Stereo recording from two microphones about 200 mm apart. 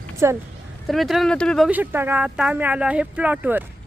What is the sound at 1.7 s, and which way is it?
Speech, 10° right (ahead or behind).